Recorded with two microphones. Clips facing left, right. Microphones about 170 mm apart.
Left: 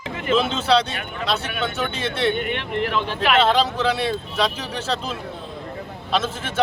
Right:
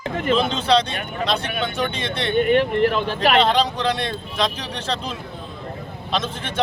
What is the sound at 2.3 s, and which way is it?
Speech, 45° right (ahead or behind).